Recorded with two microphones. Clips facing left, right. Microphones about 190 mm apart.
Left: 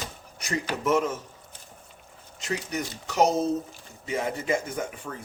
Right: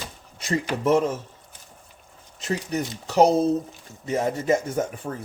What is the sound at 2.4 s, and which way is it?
Speech, 35° right (ahead or behind).